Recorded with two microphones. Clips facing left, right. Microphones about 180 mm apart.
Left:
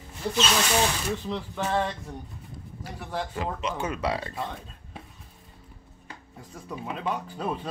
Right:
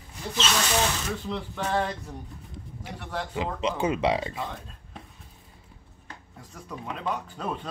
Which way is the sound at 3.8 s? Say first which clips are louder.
Right 6 dB; 20° right (ahead or behind).